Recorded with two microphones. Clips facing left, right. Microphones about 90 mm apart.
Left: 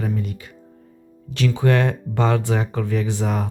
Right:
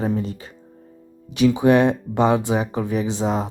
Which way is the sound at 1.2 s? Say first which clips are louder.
Right 4 dB; 15° right (ahead or behind).